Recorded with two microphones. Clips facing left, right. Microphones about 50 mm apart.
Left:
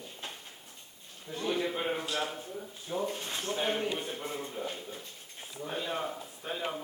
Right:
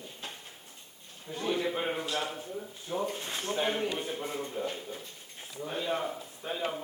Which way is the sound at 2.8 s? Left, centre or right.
Centre.